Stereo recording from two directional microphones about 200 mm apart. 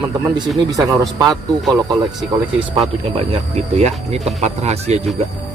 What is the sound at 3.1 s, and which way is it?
Speech, 30° right (ahead or behind).